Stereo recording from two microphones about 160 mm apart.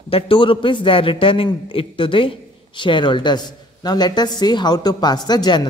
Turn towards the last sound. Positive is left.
turn(degrees=25)  # may be behind; listen again after turning